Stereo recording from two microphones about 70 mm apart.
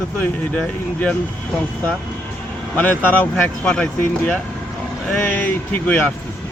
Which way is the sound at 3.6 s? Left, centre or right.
Centre.